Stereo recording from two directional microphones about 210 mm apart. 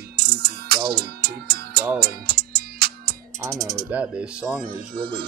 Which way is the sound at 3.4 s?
10° right (ahead or behind).